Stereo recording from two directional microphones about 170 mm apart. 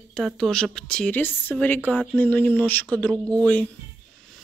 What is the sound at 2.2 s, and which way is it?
Speech, 10° left (ahead or behind).